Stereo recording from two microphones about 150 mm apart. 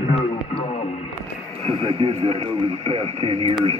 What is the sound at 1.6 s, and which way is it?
Speech, 35° right (ahead or behind).